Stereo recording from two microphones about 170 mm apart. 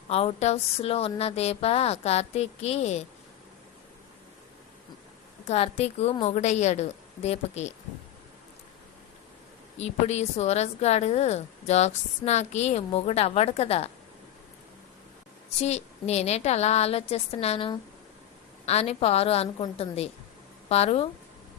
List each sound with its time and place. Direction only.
0.1 s a woman's voice: 35° left (ahead or behind)
5.5 s a woman's voice: 35° left (ahead or behind)
9.8 s a woman's voice: 40° left (ahead or behind)
15.6 s a woman's voice: 40° left (ahead or behind)